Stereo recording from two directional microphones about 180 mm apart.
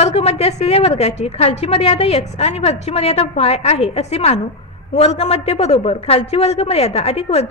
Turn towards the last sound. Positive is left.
turn(degrees=35)  # may be behind; listen again after turning